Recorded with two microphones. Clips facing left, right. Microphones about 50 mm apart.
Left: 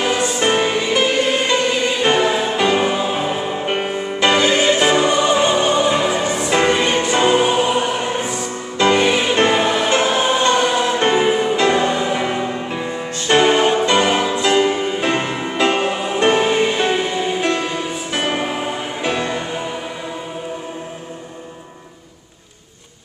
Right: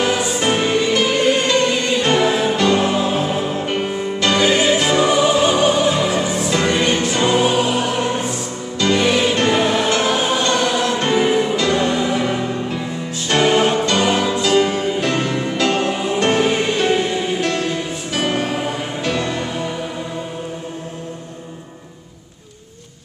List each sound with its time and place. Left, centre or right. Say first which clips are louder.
0.0 s music: even; centre
4.4 s music: right 2 dB; centre
4.7 s music: left 1 dB; centre
5.0 s music: right 1 dB; centre
6.5 s music: left 3 dB; left
6.8 s music: left 1 dB; centre
8.7 s music: left 3 dB; left
9.0 s music: left 1 dB; centre
13.6 s music: left 1 dB; centre
13.8 s music: left 1 dB; centre